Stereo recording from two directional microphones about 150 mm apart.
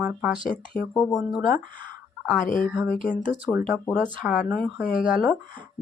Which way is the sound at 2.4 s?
65° left (ahead or behind).